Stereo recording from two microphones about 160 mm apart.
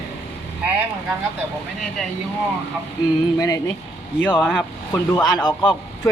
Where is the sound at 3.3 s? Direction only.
25° left (ahead or behind).